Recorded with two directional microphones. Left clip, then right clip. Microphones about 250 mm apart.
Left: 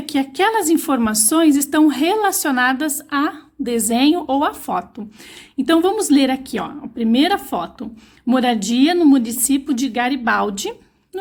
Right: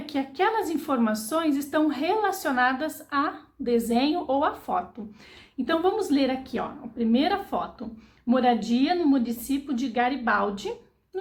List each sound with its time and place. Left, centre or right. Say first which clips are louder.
0.0 s a woman's voice: left 8 dB; left